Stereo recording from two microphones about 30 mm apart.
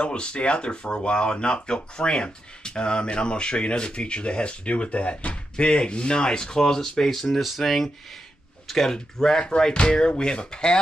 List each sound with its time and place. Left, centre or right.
0.0 s speech: left; by 7.1 s centre
7.1 s speech: centre
9.8 s speech: left